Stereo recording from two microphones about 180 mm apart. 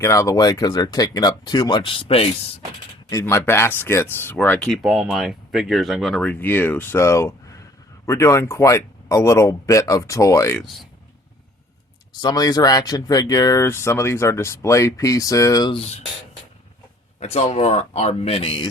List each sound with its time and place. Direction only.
0.0 s speech: 15° left (ahead or behind)
3.1 s speech: 15° left (ahead or behind)
12.2 s speech: 20° left (ahead or behind)
17.2 s speech: 35° left (ahead or behind)